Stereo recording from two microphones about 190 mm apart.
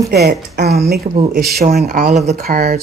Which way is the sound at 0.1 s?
55° right (ahead or behind).